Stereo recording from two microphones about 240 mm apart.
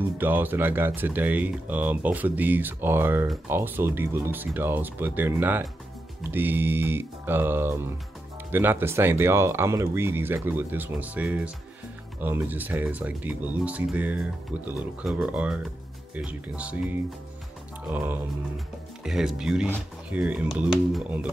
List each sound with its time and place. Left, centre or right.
0.2 s speech: centre
17.9 s speech: centre